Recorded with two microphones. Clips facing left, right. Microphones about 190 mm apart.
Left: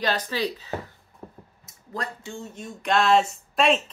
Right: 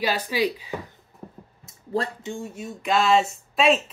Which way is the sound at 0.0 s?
10° right (ahead or behind).